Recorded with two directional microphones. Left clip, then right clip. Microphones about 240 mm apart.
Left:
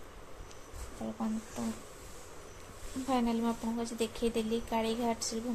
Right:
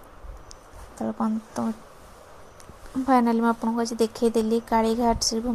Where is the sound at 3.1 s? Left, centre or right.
Right.